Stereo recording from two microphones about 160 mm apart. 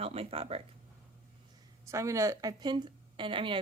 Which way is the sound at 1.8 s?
20° right (ahead or behind).